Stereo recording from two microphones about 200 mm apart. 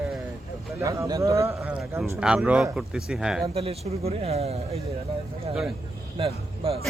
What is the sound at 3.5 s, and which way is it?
A man's voice, 30° right (ahead or behind).